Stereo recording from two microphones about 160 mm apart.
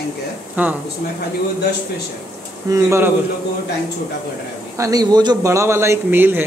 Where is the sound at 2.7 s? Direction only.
15° right (ahead or behind).